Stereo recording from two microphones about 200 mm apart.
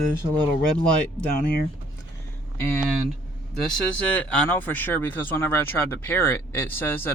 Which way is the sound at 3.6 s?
5° left (ahead or behind).